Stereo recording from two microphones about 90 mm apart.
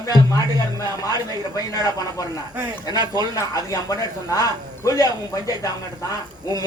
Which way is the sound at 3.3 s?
45° left (ahead or behind).